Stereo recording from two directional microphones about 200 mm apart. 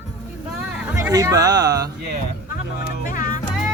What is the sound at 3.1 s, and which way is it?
Music, 40° left (ahead or behind).